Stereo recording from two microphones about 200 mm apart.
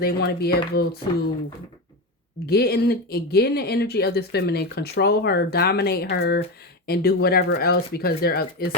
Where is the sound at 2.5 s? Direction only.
50° left (ahead or behind).